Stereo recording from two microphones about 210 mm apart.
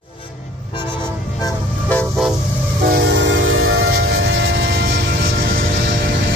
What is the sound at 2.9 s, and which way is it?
Train, 55° right (ahead or behind).